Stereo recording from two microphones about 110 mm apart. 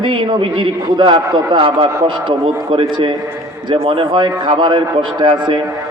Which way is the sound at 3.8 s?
50° right (ahead or behind).